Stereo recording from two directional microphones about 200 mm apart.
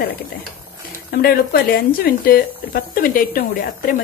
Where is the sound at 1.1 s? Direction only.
50° left (ahead or behind).